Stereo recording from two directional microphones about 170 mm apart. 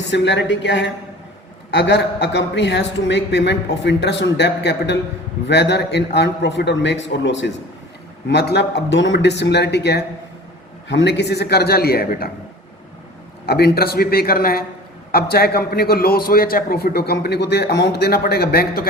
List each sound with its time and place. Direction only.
0.1 s a woman's voice: 90° left
10.8 s a man's voice: 90° left; by 12.3 s 65° left (ahead or behind)
13.4 s a man's voice: 70° left (ahead or behind)